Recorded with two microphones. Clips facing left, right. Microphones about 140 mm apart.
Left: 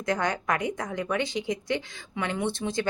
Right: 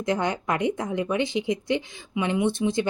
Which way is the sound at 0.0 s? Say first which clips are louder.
Right 2 dB; 20° right (ahead or behind).